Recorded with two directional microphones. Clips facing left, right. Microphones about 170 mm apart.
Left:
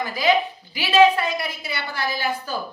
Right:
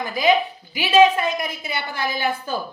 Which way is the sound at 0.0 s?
20° right (ahead or behind).